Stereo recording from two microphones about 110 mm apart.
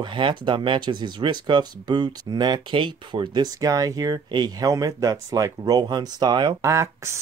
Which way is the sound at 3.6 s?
30° right (ahead or behind).